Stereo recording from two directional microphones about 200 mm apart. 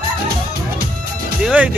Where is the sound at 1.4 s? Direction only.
5° right (ahead or behind).